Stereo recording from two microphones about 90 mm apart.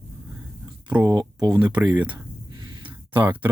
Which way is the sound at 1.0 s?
35° right (ahead or behind).